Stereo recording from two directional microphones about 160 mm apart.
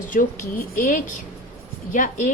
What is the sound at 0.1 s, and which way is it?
A woman's voice, 55° left (ahead or behind).